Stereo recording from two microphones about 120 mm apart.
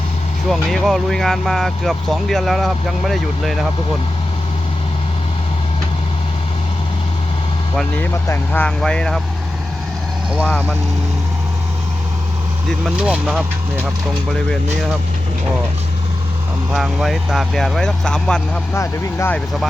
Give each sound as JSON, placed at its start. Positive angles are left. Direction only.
{"t": 0.5, "sound": "speech", "side_deg": 0}
{"t": 8.1, "sound": "speech", "side_deg": 25}
{"t": 8.6, "sound": "speech", "side_deg": 5}
{"t": 10.4, "sound": "speech", "side_deg": 10}
{"t": 13.0, "sound": "speech", "side_deg": -10}
{"t": 16.7, "sound": "speech", "side_deg": 0}
{"t": 18.7, "sound": "speech", "side_deg": 20}